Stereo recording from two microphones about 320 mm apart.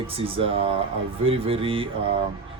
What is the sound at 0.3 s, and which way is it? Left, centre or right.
Speech, centre.